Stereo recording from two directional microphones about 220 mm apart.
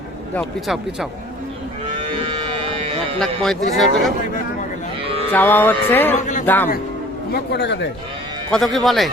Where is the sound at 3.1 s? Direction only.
Centre (ahead or behind).